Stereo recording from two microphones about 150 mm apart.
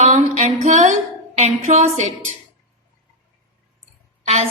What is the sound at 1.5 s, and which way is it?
Speech, 50° right (ahead or behind).